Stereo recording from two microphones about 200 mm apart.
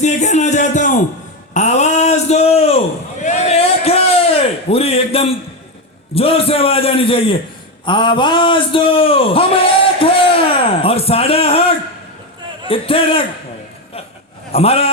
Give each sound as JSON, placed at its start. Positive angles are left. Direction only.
{"t": 0.0, "sound": "music", "side_deg": 35}
{"t": 1.5, "sound": "a sound", "side_deg": 35}
{"t": 6.1, "sound": "a man's voice", "side_deg": 30}
{"t": 12.6, "sound": "a man's voice", "side_deg": 25}
{"t": 14.5, "sound": "a man's voice", "side_deg": 30}